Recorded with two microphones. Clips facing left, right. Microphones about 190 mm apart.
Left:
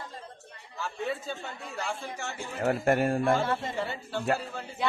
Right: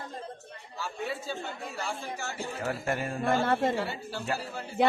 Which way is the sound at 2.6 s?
55° left (ahead or behind).